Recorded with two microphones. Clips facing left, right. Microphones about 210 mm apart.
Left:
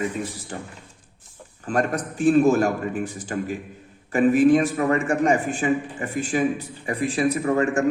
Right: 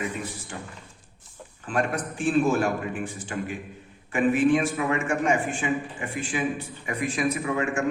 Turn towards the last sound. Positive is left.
turn(degrees=40)  # may be behind; listen again after turning